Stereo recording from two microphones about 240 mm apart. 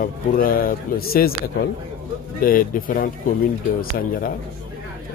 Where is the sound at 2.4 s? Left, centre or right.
Left.